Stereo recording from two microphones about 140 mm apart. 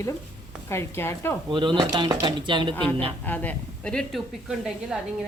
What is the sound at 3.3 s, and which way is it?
A woman's voice, 10° left (ahead or behind).